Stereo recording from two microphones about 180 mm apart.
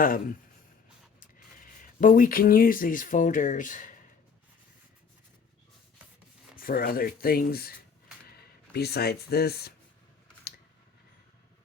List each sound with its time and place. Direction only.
0.0 s speech: 50° left (ahead or behind)
6.6 s speech: 55° left (ahead or behind)
8.7 s speech: 60° left (ahead or behind)